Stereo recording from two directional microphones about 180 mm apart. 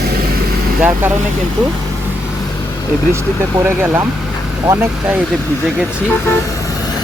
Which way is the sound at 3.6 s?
10° right (ahead or behind).